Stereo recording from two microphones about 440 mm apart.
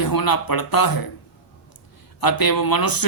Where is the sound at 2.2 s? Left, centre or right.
Left.